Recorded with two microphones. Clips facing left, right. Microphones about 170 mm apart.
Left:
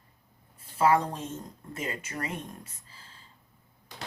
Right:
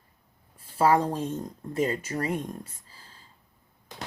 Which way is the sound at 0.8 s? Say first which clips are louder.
Right 2 dB; 35° right (ahead or behind).